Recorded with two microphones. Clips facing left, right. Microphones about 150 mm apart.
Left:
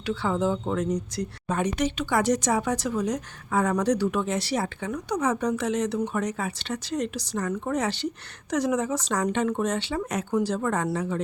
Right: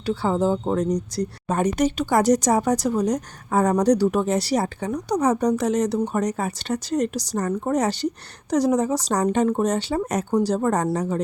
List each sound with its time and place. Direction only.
0.0 s speech: 35° right (ahead or behind)